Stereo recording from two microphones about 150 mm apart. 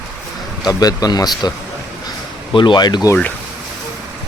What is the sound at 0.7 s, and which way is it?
Speech, 25° left (ahead or behind).